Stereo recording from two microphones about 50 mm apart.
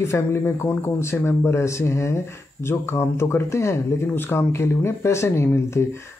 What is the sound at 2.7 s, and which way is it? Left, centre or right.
Speech, left.